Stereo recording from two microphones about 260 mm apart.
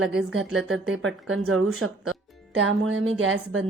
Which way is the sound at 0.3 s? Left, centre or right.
Right.